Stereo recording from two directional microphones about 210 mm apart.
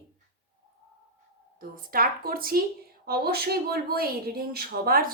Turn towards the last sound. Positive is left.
turn(degrees=-45)  # may be behind; listen again after turning